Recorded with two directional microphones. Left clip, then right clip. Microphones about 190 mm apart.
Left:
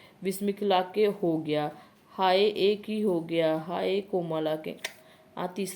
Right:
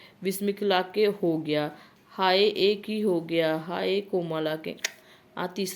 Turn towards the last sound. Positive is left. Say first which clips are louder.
# right 2 dB
turn(degrees=-15)  # may be behind; listen again after turning